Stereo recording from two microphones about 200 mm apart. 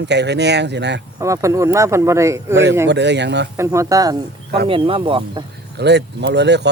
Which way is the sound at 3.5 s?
15° right (ahead or behind).